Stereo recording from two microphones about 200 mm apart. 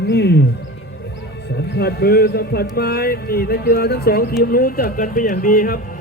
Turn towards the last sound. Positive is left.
turn(degrees=45)  # may be behind; listen again after turning